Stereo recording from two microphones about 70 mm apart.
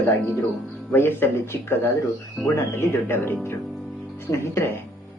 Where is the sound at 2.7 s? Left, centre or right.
Left.